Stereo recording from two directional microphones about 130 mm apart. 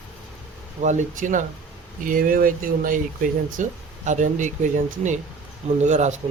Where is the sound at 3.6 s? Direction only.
70° right (ahead or behind).